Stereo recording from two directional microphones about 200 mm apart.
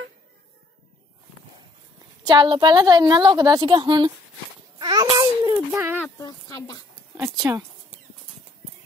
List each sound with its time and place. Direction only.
2.2 s a woman's voice: 25° right (ahead or behind)
5.7 s speech: 5° right (ahead or behind)
6.0 s speech: 15° left (ahead or behind)
7.2 s speech: 15° right (ahead or behind)